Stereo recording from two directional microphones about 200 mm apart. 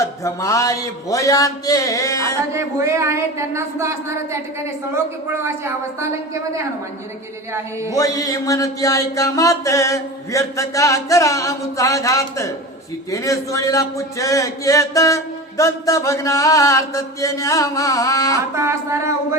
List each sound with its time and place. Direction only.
0.0 s a man's voice: 15° left (ahead or behind)
2.5 s speech: 15° right (ahead or behind)
5.3 s speech: 10° right (ahead or behind)
7.9 s a man's voice: 15° left (ahead or behind)
18.5 s speech: 15° right (ahead or behind)